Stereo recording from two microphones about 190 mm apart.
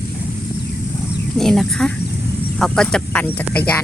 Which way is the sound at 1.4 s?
Centre (ahead or behind).